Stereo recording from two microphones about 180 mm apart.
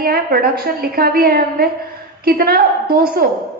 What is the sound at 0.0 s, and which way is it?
A woman's voice, 55° right (ahead or behind).